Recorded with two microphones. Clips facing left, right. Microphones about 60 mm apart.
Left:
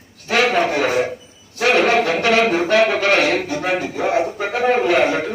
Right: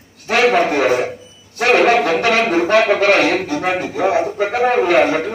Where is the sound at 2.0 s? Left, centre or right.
Right.